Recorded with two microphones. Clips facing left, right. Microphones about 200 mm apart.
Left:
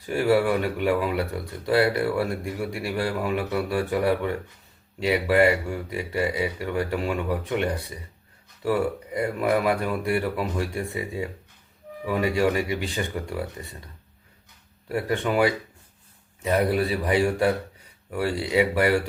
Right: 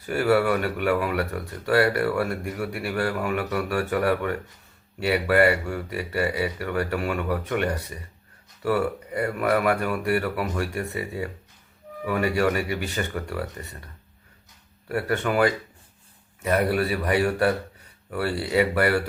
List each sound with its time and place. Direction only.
0.0 s speech: 15° left (ahead or behind)